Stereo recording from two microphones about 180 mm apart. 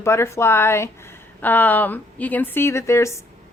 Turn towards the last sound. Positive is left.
turn(degrees=15)  # may be behind; listen again after turning